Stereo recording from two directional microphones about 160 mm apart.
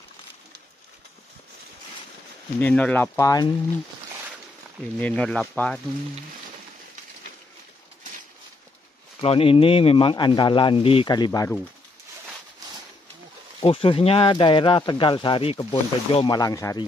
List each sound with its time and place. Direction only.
2.6 s speech: 10° left (ahead or behind)
4.9 s speech: 5° left (ahead or behind)
9.2 s speech: 35° left (ahead or behind)
13.7 s speech: 35° left (ahead or behind)
16.3 s speech: 20° left (ahead or behind)